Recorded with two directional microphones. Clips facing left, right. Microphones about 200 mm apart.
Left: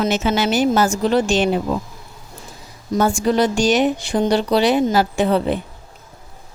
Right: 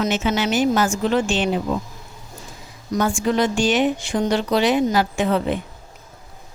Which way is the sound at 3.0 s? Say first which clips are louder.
Left 3 dB; 40° left (ahead or behind).